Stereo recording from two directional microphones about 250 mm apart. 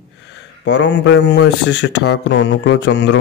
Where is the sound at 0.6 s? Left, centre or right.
Left.